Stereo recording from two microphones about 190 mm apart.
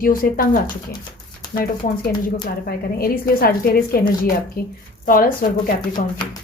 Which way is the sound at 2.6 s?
50° left (ahead or behind).